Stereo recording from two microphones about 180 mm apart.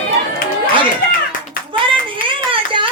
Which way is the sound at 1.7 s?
30° right (ahead or behind).